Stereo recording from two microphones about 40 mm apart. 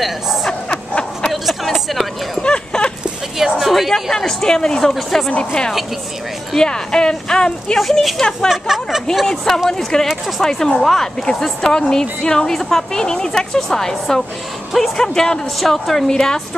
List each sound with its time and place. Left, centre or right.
0.0 s a woman's voice: centre
0.5 s a sound: centre
1.3 s a sound: centre
2.4 s clip-clop: left
3.3 s a woman's voice: centre
3.9 s a woman's voice: centre
4.9 s a woman's voice: centre
5.3 s speech: left
7.8 s a woman's voice: centre
8.2 s a woman's voice: centre
8.5 s speech: centre
9.7 s a woman's voice: centre